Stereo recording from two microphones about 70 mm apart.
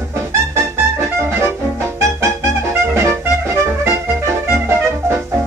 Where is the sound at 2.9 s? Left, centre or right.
Right.